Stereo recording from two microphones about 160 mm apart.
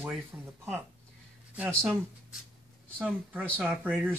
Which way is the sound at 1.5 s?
5° right (ahead or behind).